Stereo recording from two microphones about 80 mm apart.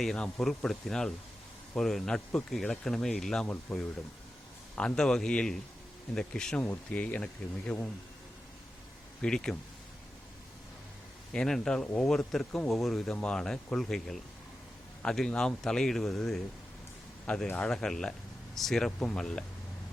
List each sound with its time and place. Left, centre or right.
0.0 s speech: centre
4.7 s a man's voice: centre
4.9 s a man's voice: centre
6.6 s a man's voice: centre
9.2 s a man's voice: centre
11.3 s a man's voice: centre
18.9 s a man's voice: centre